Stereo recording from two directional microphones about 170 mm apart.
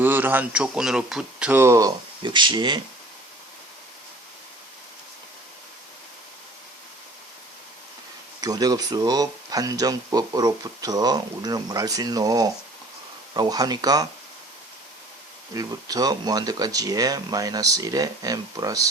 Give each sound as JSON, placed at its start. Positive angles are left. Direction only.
{"t": 0.0, "sound": "speech", "side_deg": -10}
{"t": 2.2, "sound": "speech", "side_deg": -30}
{"t": 8.4, "sound": "speech", "side_deg": -20}
{"t": 15.5, "sound": "speech", "side_deg": -20}